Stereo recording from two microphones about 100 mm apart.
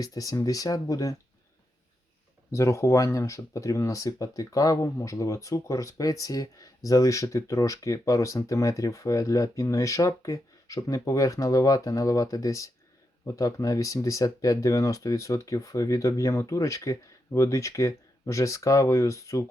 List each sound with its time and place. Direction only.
0.0 s speech: 35° left (ahead or behind)
2.5 s speech: 30° left (ahead or behind)